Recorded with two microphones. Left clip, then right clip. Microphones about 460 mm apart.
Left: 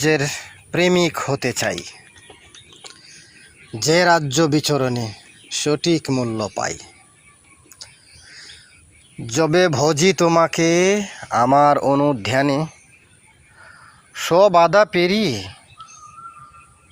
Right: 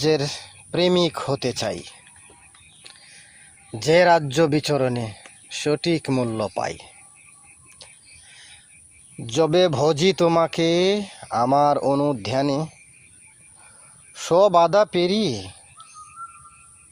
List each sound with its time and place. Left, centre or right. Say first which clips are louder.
0.0 s speech: left 2 dB; right
3.7 s speech: left 1 dB; right
7.8 s owl: left 5 dB; right
9.2 s speech: left 2 dB; right
14.1 s speech: left 3 dB; right